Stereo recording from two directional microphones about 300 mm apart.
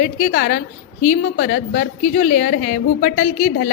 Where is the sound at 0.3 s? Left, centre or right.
Left.